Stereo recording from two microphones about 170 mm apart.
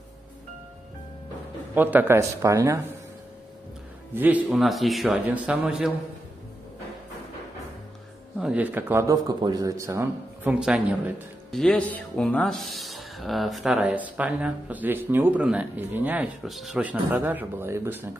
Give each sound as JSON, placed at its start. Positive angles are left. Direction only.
{"t": 1.8, "sound": "a man's voice", "side_deg": -10}
{"t": 4.1, "sound": "a man's voice", "side_deg": -10}
{"t": 8.4, "sound": "a man's voice", "side_deg": -5}
{"t": 10.5, "sound": "a man's voice", "side_deg": -5}